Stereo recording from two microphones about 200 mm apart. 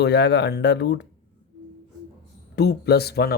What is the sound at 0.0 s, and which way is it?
Speech, 60° left (ahead or behind).